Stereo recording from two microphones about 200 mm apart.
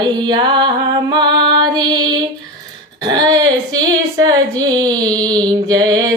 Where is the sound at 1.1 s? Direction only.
20° right (ahead or behind).